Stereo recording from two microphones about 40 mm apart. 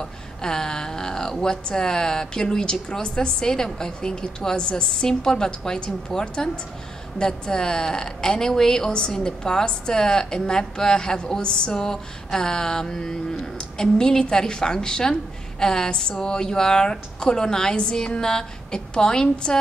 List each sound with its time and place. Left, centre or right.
0.0 s a woman's voice: centre